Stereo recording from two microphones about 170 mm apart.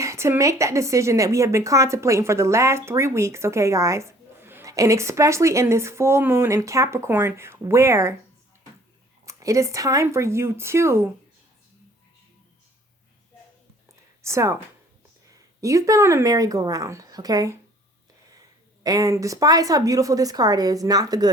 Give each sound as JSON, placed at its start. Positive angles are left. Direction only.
{"t": 0.0, "sound": "a woman's voice", "side_deg": -15}
{"t": 9.2, "sound": "a woman's voice", "side_deg": -20}
{"t": 14.2, "sound": "a woman's voice", "side_deg": -15}
{"t": 15.6, "sound": "a woman's voice", "side_deg": -20}
{"t": 18.8, "sound": "a woman's voice", "side_deg": -20}